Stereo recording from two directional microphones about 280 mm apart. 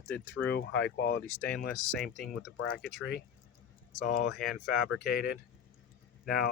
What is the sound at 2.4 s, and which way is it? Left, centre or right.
Speech, left.